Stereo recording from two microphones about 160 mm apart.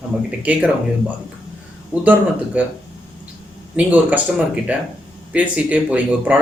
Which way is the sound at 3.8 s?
10° right (ahead or behind).